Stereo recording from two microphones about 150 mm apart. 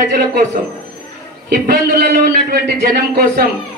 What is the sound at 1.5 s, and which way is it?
A man's voice, 90° right.